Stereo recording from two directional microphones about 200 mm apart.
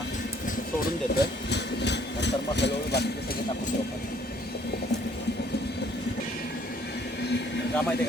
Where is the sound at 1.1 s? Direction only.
60° left (ahead or behind).